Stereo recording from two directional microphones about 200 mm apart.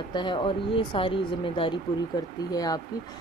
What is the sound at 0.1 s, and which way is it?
Speech, 25° left (ahead or behind).